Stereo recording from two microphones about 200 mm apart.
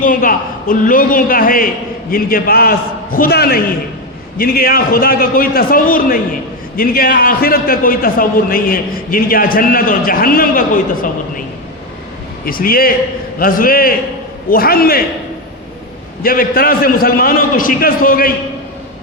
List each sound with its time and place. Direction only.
0.0 s a man's voice: 45° left (ahead or behind)
12.5 s a man's voice: 45° left (ahead or behind)
16.2 s a man's voice: 45° left (ahead or behind)